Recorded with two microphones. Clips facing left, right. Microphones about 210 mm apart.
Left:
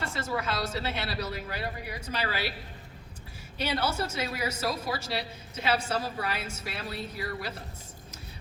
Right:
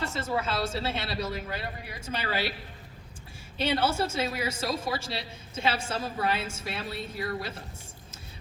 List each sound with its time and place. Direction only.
0.0 s a woman's voice: 25° right (ahead or behind)
3.6 s a woman's voice: 30° right (ahead or behind)